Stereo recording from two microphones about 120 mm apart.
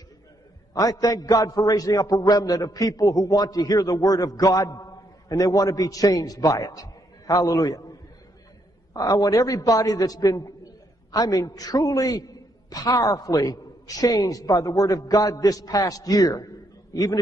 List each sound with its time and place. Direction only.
0.7 s a man's voice: 30° left (ahead or behind)
8.9 s a man's voice: 30° left (ahead or behind)